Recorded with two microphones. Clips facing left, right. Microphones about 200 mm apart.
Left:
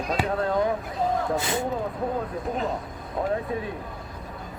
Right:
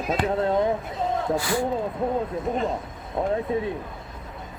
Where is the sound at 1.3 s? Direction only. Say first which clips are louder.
Right 2 dB; 20° left (ahead or behind).